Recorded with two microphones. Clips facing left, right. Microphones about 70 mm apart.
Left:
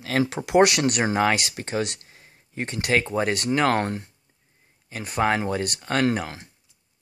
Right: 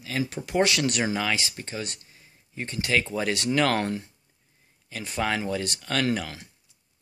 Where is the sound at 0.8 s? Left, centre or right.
Left.